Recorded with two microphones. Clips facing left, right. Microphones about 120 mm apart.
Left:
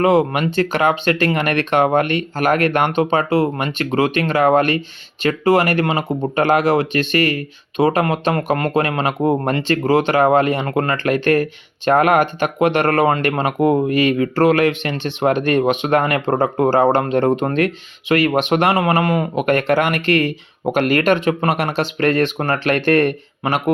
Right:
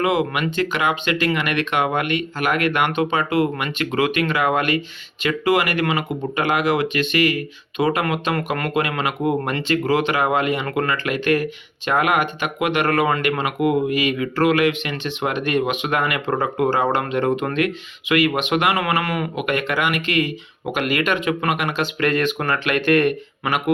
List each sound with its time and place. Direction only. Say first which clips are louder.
0.0 s speech: left 5 dB; 40° left (ahead or behind)